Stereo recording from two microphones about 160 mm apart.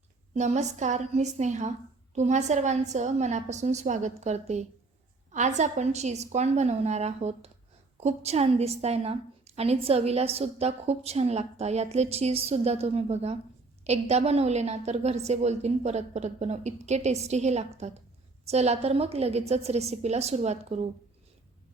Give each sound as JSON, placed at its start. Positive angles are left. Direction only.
{"t": 0.3, "sound": "a woman's voice", "side_deg": -45}